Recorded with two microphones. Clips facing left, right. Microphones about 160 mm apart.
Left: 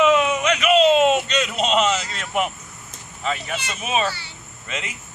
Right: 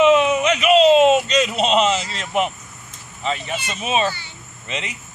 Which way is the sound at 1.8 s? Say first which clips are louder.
Right 2 dB; 30° right (ahead or behind).